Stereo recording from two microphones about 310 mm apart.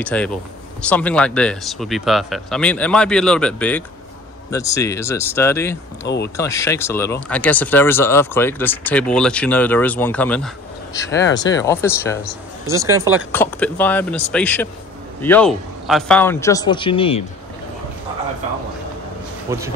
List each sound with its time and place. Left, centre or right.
0.0 s speech: centre
6.0 s speech: left
6.3 s speech: centre
12.6 s speech: centre
13.3 s speech: centre
19.5 s speech: centre